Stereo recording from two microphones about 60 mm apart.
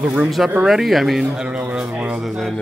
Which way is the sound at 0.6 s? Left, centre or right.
Centre.